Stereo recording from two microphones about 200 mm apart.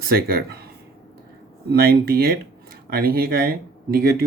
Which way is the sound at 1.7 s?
50° right (ahead or behind).